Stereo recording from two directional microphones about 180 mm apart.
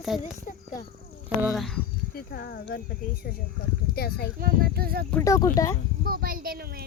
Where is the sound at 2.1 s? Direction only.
60° left (ahead or behind).